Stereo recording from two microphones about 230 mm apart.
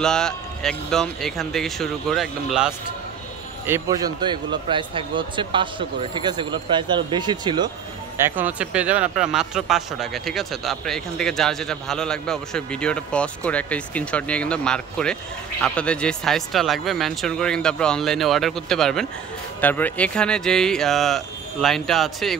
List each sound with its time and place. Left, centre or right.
0.0 s speech: centre
3.6 s speech: centre
8.2 s speech: centre